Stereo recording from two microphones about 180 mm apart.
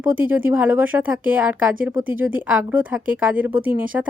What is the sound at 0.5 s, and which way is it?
A woman's voice, 10° right (ahead or behind).